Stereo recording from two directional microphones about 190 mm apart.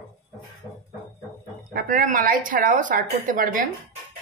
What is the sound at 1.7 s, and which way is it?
Speech, 45° right (ahead or behind).